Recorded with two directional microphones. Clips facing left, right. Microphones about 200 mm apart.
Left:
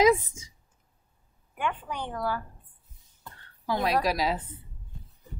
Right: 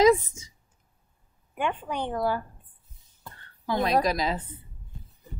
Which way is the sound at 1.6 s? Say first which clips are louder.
Right 3 dB; 20° right (ahead or behind).